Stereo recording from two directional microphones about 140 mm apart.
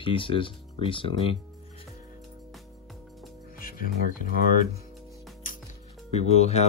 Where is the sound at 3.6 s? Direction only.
90° left.